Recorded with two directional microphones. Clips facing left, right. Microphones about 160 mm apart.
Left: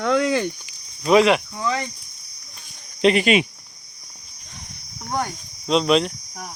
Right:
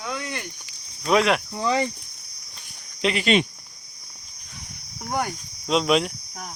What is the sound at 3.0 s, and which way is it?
Speech, 60° left (ahead or behind).